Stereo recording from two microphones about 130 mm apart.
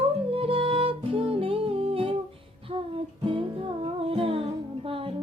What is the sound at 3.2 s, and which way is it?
Music, 40° right (ahead or behind).